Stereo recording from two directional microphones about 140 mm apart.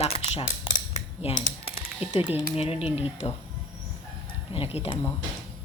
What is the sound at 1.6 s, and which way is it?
Typing, 45° left (ahead or behind).